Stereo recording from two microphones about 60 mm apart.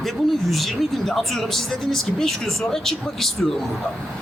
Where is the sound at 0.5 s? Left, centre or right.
Centre.